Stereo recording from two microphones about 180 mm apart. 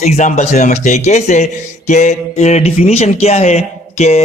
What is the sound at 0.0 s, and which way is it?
A man's voice, 40° left (ahead or behind).